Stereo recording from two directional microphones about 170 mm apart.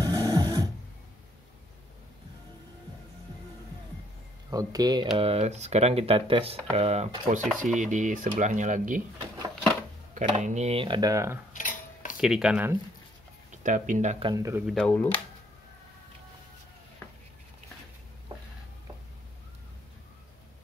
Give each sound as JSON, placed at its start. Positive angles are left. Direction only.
{"t": 0.0, "sound": "a sound", "side_deg": -20}
{"t": 4.5, "sound": "speech", "side_deg": -20}
{"t": 5.1, "sound": "speech", "side_deg": -35}
{"t": 7.5, "sound": "dishes", "side_deg": -45}
{"t": 10.1, "sound": "speech", "side_deg": -45}
{"t": 11.5, "sound": "a sound", "side_deg": 50}
{"t": 12.2, "sound": "speech", "side_deg": -5}
{"t": 13.5, "sound": "speech", "side_deg": -50}
{"t": 14.3, "sound": "speech", "side_deg": -20}
{"t": 14.7, "sound": "speech", "side_deg": 5}